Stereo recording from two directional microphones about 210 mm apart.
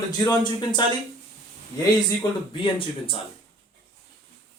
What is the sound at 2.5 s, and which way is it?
Speech, 25° left (ahead or behind).